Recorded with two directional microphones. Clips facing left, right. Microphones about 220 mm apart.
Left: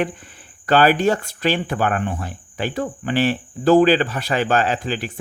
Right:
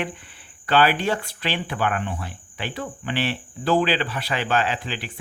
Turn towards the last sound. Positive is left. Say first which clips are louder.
# left 4 dB
turn(degrees=45)  # may be behind; listen again after turning